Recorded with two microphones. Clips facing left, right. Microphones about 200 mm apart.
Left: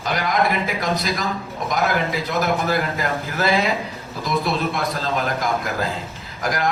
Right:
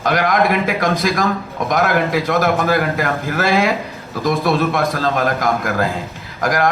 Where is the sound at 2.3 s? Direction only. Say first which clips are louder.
Right 4 dB; 55° right (ahead or behind).